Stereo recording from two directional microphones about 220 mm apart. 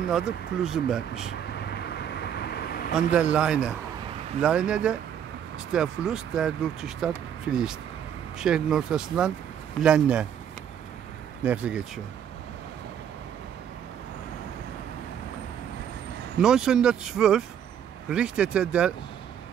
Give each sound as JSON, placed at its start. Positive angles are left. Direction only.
{"t": 0.1, "sound": "speech", "side_deg": 0}
{"t": 1.5, "sound": "vehicle", "side_deg": 50}
{"t": 2.9, "sound": "speech", "side_deg": -5}
{"t": 11.4, "sound": "speech", "side_deg": -5}
{"t": 16.3, "sound": "speech", "side_deg": -5}